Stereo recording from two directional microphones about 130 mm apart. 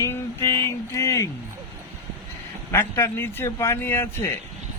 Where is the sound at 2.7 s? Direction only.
15° left (ahead or behind).